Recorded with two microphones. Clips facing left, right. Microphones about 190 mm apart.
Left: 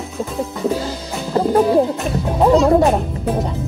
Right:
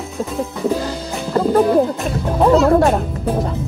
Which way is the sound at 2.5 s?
Centre (ahead or behind).